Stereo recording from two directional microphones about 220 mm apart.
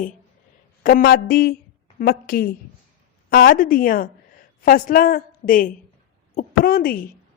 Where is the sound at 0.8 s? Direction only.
40° left (ahead or behind).